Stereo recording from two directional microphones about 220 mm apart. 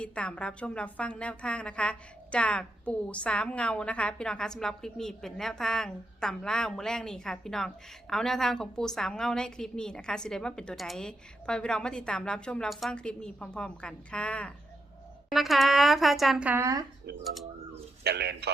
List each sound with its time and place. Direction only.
0.0 s a woman's voice: 5° left (ahead or behind); by 16.8 s 15° right (ahead or behind)
18.0 s a man's voice: 50° right (ahead or behind)